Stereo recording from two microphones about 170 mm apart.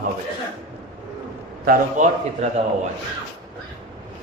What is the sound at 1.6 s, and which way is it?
Speech, 45° right (ahead or behind).